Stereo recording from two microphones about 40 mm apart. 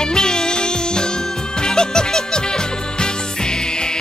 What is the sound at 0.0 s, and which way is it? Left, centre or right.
Music, centre.